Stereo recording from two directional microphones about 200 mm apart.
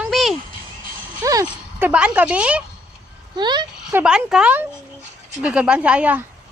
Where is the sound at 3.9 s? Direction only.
5° right (ahead or behind).